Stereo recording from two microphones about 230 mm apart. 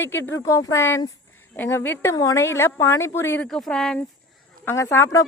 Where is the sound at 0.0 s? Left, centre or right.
Centre.